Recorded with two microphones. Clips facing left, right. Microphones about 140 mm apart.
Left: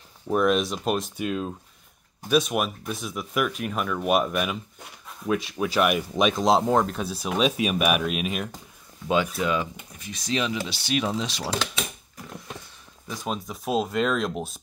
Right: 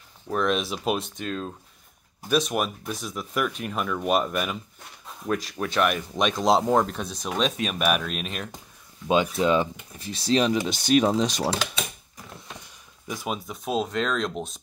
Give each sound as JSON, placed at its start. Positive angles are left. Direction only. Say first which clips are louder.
{"t": 0.3, "sound": "speech", "louder": "left 3 dB", "side_deg": 5}
{"t": 1.1, "sound": "speech", "louder": "left 3 dB", "side_deg": 10}
{"t": 9.0, "sound": "speech", "louder": "right 2 dB", "side_deg": -20}
{"t": 13.1, "sound": "speech", "louder": "even", "side_deg": -10}